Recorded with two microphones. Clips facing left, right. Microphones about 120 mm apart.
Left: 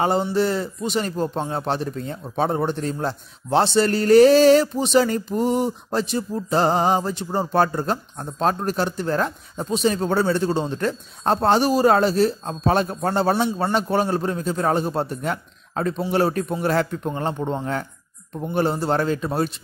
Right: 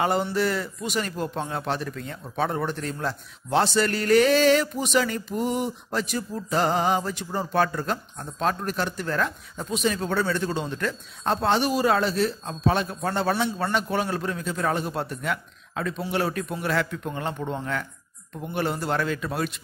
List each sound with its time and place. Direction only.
0.0 s speech: 25° left (ahead or behind)